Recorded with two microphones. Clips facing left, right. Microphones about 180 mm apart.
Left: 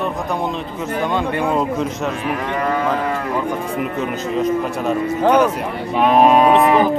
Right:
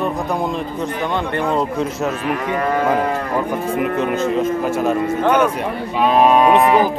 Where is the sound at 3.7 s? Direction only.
55° right (ahead or behind).